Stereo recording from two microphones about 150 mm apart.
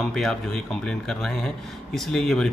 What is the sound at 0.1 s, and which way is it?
A man's voice, centre (ahead or behind).